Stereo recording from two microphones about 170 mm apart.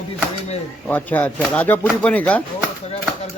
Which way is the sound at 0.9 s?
10° left (ahead or behind).